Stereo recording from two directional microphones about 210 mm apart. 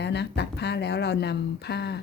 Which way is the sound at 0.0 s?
55° left (ahead or behind).